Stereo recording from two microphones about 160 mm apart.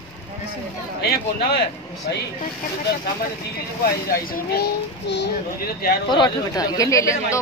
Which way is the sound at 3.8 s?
65° left (ahead or behind).